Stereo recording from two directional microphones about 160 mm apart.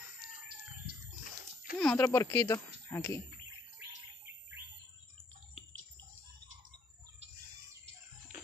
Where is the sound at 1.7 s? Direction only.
10° left (ahead or behind).